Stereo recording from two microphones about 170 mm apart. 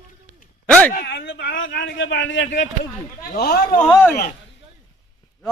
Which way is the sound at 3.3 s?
65° left (ahead or behind).